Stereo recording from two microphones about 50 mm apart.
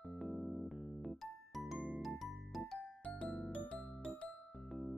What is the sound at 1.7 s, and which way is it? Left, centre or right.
Music, right.